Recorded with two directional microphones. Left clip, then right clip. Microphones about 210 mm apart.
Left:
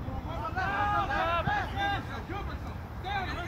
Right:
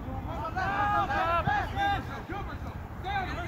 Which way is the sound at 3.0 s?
Centre (ahead or behind).